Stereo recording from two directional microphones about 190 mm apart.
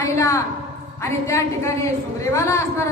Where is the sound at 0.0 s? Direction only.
15° left (ahead or behind).